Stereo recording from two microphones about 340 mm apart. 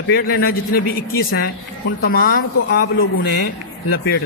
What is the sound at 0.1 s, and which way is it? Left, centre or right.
A man's voice, left.